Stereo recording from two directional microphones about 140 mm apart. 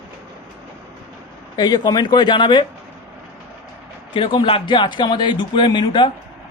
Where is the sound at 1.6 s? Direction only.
30° left (ahead or behind).